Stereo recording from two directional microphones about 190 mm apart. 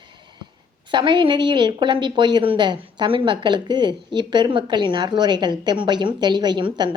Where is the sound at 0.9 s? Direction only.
25° right (ahead or behind).